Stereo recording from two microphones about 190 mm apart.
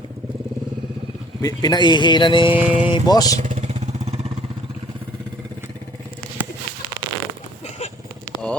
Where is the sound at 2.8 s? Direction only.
20° left (ahead or behind).